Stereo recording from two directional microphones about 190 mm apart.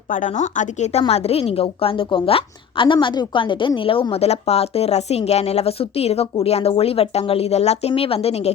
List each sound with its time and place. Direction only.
0.1 s a woman's voice: 40° left (ahead or behind)